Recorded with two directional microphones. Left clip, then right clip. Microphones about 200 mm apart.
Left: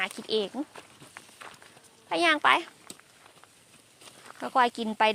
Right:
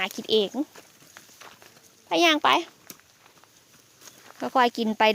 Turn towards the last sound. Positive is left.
turn(degrees=-45)  # may be behind; listen again after turning